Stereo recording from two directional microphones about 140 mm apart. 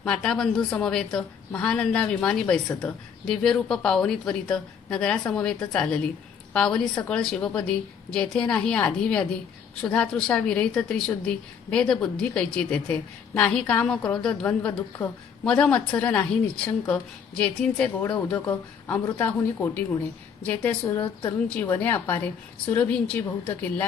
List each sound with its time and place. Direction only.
0.0 s a woman's voice: 5° left (ahead or behind)